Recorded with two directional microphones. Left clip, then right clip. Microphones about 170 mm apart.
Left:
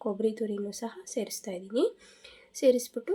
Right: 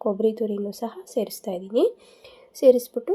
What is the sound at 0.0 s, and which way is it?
A woman's voice, 5° right (ahead or behind).